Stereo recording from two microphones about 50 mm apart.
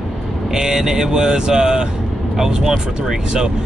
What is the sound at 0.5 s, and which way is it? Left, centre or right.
Speech, centre.